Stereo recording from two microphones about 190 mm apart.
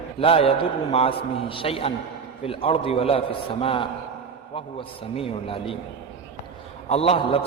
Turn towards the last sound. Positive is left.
turn(degrees=30)  # may be behind; listen again after turning